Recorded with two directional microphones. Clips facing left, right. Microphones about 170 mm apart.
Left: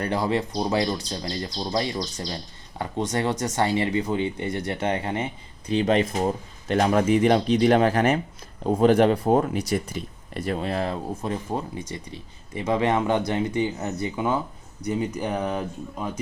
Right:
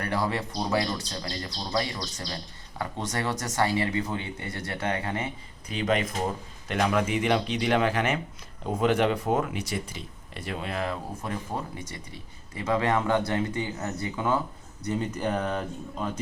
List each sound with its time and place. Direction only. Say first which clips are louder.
0.0 s speech: left 4 dB; 20° left (ahead or behind)